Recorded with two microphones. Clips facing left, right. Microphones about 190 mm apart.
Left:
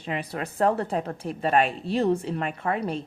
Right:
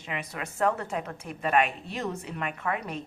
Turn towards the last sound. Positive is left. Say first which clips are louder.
# left 5 dB
turn(degrees=30)  # may be behind; listen again after turning